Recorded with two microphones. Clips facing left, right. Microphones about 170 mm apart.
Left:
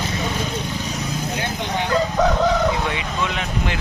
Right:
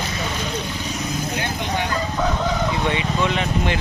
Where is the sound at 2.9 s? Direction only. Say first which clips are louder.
Right 3 dB; centre (ahead or behind).